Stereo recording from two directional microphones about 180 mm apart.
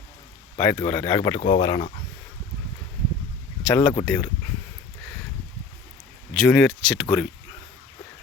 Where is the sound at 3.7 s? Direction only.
15° left (ahead or behind).